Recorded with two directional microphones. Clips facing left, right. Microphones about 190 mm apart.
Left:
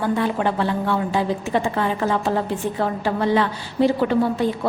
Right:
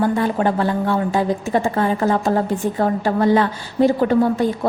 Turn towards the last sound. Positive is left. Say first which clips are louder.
# right 3 dB
turn(degrees=-45)  # may be behind; listen again after turning